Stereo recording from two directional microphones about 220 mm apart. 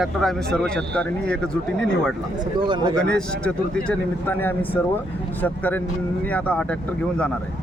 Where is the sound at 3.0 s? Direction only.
5° left (ahead or behind).